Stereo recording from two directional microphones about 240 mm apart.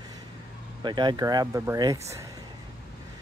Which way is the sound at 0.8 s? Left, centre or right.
Centre.